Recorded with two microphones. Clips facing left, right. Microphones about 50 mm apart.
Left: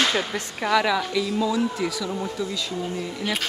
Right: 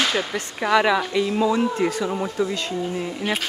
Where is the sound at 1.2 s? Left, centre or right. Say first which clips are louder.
Right 3 dB; right.